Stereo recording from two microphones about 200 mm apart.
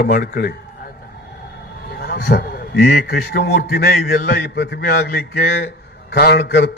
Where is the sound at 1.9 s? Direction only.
55° left (ahead or behind).